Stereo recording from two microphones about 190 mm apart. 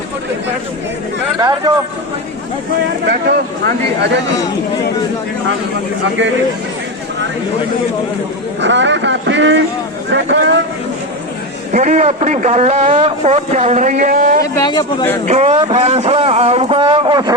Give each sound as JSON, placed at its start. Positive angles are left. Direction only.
{"t": 1.4, "sound": "speech", "side_deg": -20}
{"t": 3.1, "sound": "speech", "side_deg": -55}
{"t": 8.6, "sound": "speech", "side_deg": -70}
{"t": 11.7, "sound": "a man's voice", "side_deg": -40}
{"t": 14.4, "sound": "a man's voice", "side_deg": 20}
{"t": 15.3, "sound": "a man's voice", "side_deg": -35}